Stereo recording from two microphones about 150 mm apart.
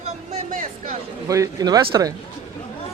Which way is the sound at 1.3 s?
25° right (ahead or behind).